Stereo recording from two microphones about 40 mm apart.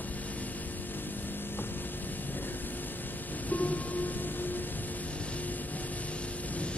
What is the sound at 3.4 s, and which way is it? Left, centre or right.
Music, left.